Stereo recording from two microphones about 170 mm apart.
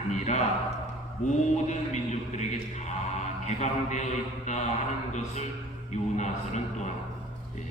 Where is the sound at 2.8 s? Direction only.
45° left (ahead or behind).